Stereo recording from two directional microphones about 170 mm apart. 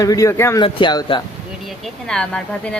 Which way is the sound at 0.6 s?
30° left (ahead or behind).